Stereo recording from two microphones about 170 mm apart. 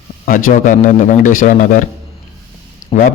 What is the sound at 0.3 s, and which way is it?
A man's voice, 55° left (ahead or behind).